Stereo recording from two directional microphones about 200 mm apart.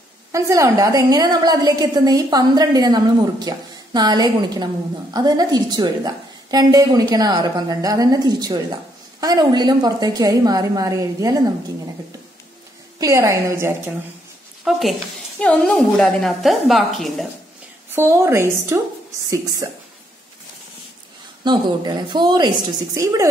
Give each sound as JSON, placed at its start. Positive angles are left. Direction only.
{"t": 0.3, "sound": "a woman's voice", "side_deg": -15}
{"t": 13.0, "sound": "a woman's voice", "side_deg": -15}
{"t": 14.6, "sound": "a woman's voice", "side_deg": 0}
{"t": 17.9, "sound": "a woman's voice", "side_deg": -15}
{"t": 21.5, "sound": "a woman's voice", "side_deg": -20}